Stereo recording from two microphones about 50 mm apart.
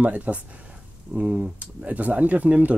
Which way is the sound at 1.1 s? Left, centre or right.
Centre.